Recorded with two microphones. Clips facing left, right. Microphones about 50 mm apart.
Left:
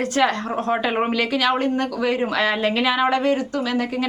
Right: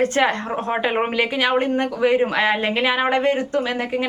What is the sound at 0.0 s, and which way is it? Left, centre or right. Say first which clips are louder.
Speech: right 1 dB; right.